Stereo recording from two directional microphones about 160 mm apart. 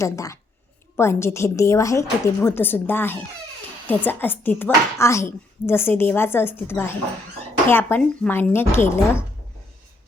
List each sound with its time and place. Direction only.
0.0 s speech: 20° left (ahead or behind)